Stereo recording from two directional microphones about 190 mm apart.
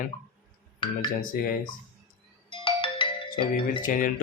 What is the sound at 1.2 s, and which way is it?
Speech, 50° left (ahead or behind).